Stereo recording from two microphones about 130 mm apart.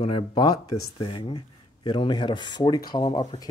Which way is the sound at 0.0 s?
40° left (ahead or behind).